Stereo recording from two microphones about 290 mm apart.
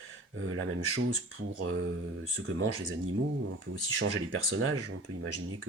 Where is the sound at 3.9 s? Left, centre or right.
Right.